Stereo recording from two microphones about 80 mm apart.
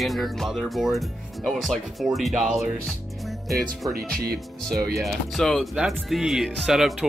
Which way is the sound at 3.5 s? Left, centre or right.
Centre.